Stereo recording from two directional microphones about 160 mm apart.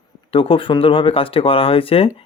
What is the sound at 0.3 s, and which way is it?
Speech, 35° left (ahead or behind).